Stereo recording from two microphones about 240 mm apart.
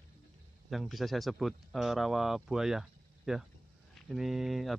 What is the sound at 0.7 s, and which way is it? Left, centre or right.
Speech, centre.